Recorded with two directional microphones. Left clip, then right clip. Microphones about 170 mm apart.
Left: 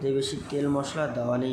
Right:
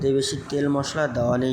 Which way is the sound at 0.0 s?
20° right (ahead or behind).